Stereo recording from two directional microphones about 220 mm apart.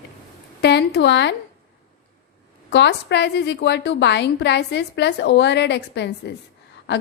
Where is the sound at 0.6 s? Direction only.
50° left (ahead or behind).